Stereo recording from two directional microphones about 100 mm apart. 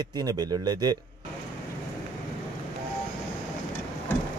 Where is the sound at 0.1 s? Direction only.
40° right (ahead or behind).